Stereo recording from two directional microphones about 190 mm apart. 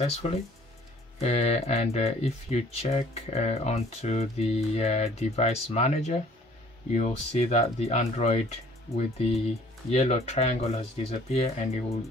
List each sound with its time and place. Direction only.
1.2 s speech: 35° left (ahead or behind)